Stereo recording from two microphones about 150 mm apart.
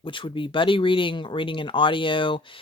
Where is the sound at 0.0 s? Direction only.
35° left (ahead or behind).